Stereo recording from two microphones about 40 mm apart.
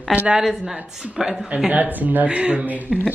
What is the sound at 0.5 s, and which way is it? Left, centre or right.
Speech, centre.